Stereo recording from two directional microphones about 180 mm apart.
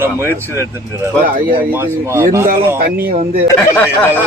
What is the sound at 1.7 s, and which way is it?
Speech, 15° right (ahead or behind).